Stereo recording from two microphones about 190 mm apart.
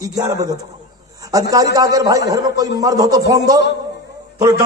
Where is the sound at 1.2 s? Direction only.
20° right (ahead or behind).